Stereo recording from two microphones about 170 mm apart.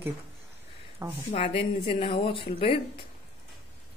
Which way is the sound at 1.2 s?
35° left (ahead or behind).